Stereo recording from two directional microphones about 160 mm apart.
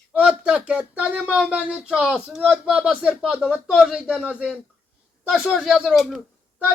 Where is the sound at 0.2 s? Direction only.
5° right (ahead or behind).